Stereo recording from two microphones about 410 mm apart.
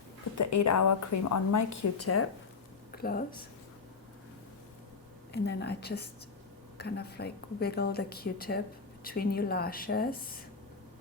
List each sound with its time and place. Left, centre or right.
0.3 s a woman's voice: left
2.9 s speech: left
5.3 s a woman's voice: left